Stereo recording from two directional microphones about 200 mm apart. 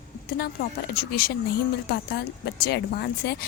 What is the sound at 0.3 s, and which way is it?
Speech, 50° left (ahead or behind).